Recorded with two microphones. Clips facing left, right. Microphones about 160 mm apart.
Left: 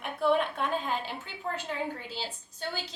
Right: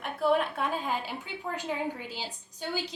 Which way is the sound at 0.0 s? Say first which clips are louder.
Even; 5° right (ahead or behind).